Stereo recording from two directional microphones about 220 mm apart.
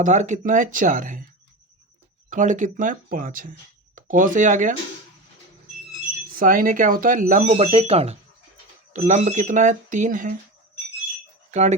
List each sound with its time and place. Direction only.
0.0 s speech: 35° right (ahead or behind)
2.3 s speech: 35° right (ahead or behind)
6.3 s speech: 40° right (ahead or behind)
11.5 s speech: 35° right (ahead or behind)